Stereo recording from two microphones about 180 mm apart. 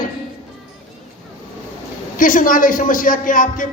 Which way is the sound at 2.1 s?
50° left (ahead or behind).